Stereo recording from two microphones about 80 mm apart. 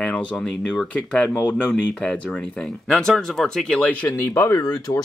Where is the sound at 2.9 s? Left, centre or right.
Centre.